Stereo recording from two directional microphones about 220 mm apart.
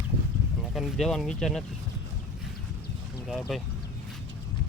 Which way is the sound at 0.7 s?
Centre (ahead or behind).